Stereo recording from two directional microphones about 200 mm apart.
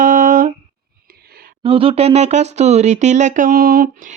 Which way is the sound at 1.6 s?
25° right (ahead or behind).